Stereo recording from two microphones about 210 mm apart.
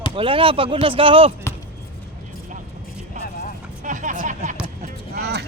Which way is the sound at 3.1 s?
35° right (ahead or behind).